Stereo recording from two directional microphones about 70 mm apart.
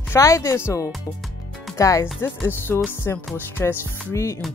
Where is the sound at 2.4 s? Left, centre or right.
Left.